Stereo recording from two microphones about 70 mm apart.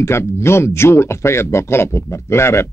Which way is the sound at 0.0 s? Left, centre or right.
Left.